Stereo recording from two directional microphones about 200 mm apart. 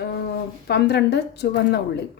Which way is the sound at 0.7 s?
55° left (ahead or behind).